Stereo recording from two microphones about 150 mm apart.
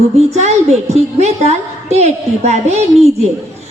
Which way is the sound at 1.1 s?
45° right (ahead or behind).